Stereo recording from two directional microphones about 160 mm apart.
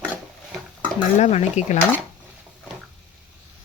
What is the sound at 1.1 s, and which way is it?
Speech, 45° left (ahead or behind).